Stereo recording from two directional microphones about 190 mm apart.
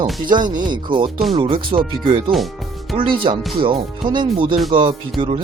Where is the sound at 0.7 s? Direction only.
25° right (ahead or behind).